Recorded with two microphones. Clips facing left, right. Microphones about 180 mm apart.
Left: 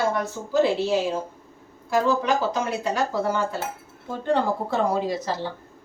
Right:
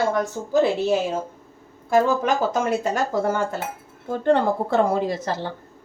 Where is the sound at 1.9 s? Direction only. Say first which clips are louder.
Right 2 dB; 50° right (ahead or behind).